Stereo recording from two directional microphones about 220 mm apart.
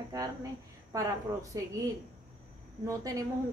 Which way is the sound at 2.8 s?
15° right (ahead or behind).